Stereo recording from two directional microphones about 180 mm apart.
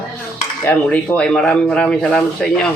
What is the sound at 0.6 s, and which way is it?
Speech, 5° left (ahead or behind).